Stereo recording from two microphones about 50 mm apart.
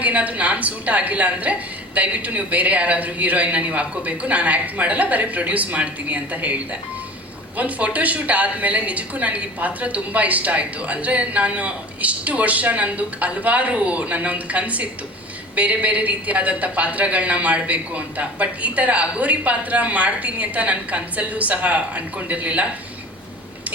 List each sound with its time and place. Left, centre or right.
0.0 s a woman's voice: right